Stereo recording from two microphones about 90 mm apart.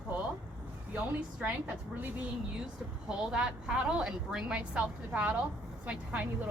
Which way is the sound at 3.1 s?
5° right (ahead or behind).